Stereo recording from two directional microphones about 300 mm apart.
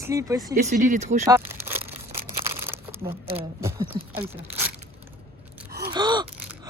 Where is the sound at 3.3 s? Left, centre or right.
Centre.